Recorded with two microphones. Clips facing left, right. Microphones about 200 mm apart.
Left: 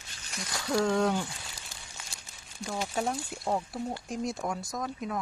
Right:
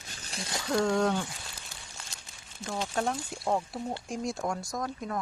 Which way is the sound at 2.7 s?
5° left (ahead or behind).